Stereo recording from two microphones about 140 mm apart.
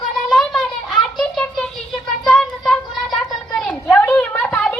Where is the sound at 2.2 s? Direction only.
5° left (ahead or behind).